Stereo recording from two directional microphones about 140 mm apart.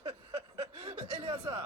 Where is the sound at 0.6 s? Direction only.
40° right (ahead or behind).